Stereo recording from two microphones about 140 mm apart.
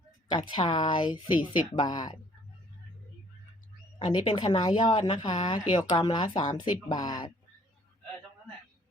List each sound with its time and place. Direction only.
0.3 s a woman's voice: 35° left (ahead or behind)
3.9 s a woman's voice: 35° left (ahead or behind)